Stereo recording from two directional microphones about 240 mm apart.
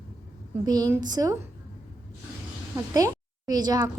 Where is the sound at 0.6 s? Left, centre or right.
Centre.